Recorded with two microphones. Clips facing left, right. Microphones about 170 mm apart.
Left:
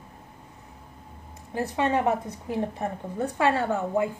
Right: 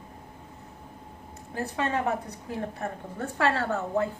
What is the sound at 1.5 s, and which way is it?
A woman's voice, 20° left (ahead or behind).